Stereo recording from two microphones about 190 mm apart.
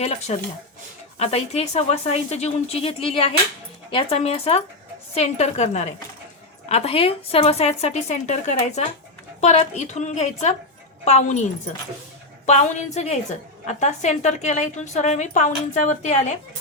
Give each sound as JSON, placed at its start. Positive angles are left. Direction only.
{"t": 0.0, "sound": "a woman's voice", "side_deg": 35}
{"t": 12.5, "sound": "a woman's voice", "side_deg": 35}